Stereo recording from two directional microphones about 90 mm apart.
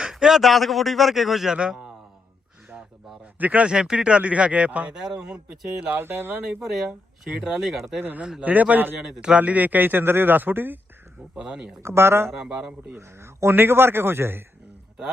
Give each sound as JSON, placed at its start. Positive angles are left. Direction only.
{"t": 0.0, "sound": "speech", "side_deg": -5}
{"t": 3.3, "sound": "speech", "side_deg": -15}
{"t": 5.9, "sound": "a man's voice", "side_deg": -25}
{"t": 6.5, "sound": "speech", "side_deg": -5}
{"t": 8.0, "sound": "a man's voice", "side_deg": -20}
{"t": 9.0, "sound": "a man's voice", "side_deg": -5}
{"t": 11.3, "sound": "speech", "side_deg": -10}
{"t": 11.8, "sound": "a man's voice", "side_deg": -30}
{"t": 12.4, "sound": "speech", "side_deg": -10}
{"t": 13.0, "sound": "a man's voice", "side_deg": -30}